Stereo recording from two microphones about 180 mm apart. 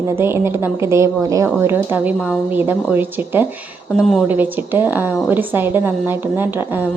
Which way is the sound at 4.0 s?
Centre (ahead or behind).